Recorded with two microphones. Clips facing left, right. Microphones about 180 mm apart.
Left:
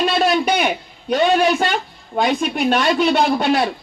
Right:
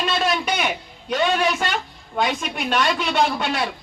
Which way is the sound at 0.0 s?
35° left (ahead or behind).